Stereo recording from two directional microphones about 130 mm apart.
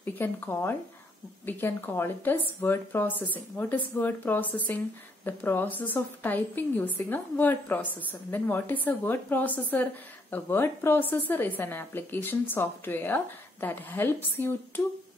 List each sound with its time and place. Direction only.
0.0 s a woman's voice: 15° left (ahead or behind)